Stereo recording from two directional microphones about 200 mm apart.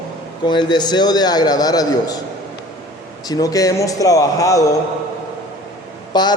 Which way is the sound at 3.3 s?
20° left (ahead or behind).